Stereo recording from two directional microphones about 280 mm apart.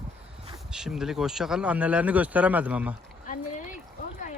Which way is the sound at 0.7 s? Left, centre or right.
Centre.